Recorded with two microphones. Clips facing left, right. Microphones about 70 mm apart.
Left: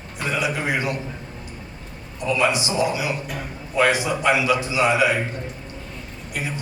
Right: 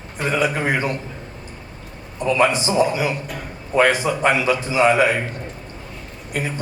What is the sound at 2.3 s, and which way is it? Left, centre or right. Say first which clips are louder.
A man's voice: right 3 dB; right.